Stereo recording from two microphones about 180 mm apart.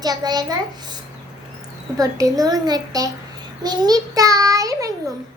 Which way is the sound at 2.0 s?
20° right (ahead or behind).